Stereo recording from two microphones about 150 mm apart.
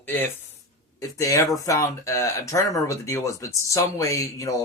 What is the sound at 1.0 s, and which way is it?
Speech, 20° left (ahead or behind).